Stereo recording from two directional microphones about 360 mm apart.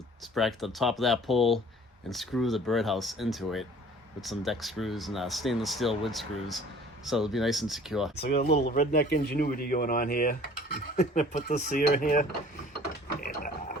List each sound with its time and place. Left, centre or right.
0.2 s speech: centre
8.1 s speech: left
13.2 s pig: left